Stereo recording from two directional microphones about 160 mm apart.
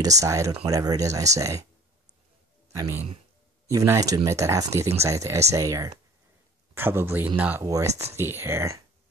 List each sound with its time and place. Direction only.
0.0 s speech: 20° right (ahead or behind)
2.7 s speech: 15° right (ahead or behind)
7.6 s speech: 20° right (ahead or behind)